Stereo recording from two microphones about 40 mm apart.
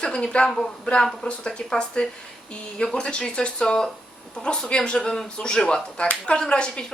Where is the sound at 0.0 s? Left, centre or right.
Left.